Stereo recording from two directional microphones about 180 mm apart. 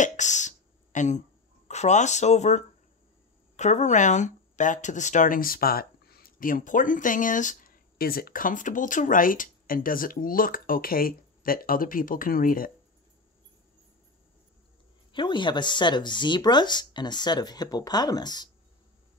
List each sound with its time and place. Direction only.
0.0 s a sound: 40° left (ahead or behind)
1.7 s speech: 40° left (ahead or behind)
15.1 s speech: 25° left (ahead or behind)